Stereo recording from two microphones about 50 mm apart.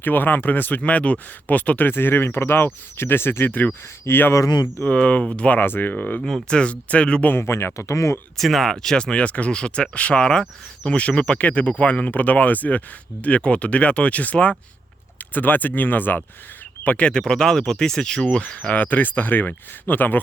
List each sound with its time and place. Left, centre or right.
0.0 s speech: left
3.4 s speech: left
4.1 s speech: left
4.9 s speech: left
5.5 s speech: left
5.9 s speech: left
6.2 s speech: centre
7.3 s speech: left
8.4 s speech: centre
9.0 s speech: centre
17.1 s speech: centre
18.7 s speech: left